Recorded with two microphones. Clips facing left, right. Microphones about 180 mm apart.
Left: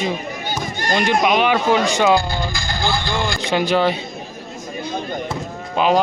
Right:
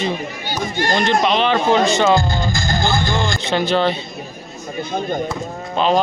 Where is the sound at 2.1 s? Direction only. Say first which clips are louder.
Right 2 dB; 45° right (ahead or behind).